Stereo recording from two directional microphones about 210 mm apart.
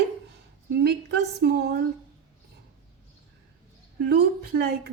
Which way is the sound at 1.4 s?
50° right (ahead or behind).